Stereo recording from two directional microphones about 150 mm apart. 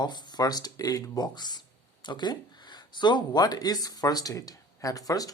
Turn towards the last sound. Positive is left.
turn(degrees=25)  # may be behind; listen again after turning